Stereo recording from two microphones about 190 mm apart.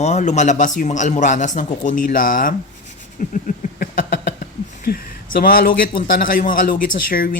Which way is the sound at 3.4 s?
45° left (ahead or behind).